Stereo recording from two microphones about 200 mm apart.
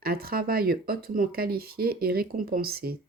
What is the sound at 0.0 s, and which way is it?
Speech, 50° right (ahead or behind).